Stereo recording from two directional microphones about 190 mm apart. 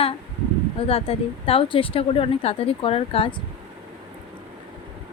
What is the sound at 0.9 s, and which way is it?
Speech, 30° left (ahead or behind).